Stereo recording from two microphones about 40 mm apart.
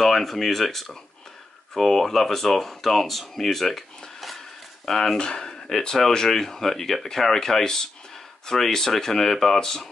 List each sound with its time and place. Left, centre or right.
0.0 s speech: centre
4.8 s speech: centre